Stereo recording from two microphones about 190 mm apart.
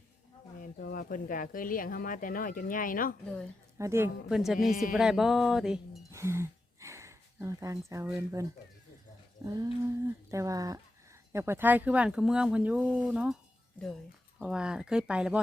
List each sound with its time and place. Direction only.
0.6 s speech: 50° left (ahead or behind)
3.8 s speech: 15° right (ahead or behind)
4.3 s music: centre (ahead or behind)
6.1 s a sound: 15° right (ahead or behind)
9.4 s humming: 15° right (ahead or behind)
10.1 s speech: 15° right (ahead or behind)
14.4 s music: 5° right (ahead or behind)